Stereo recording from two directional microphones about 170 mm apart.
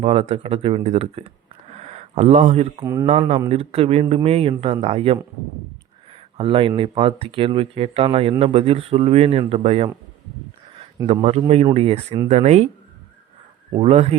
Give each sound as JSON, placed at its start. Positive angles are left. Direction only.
{"t": 0.0, "sound": "speech", "side_deg": -35}
{"t": 1.7, "sound": "a sound", "side_deg": -40}
{"t": 2.8, "sound": "speech", "side_deg": -25}
{"t": 3.5, "sound": "speech", "side_deg": -35}
{"t": 11.0, "sound": "speech", "side_deg": -35}
{"t": 13.7, "sound": "speech", "side_deg": -35}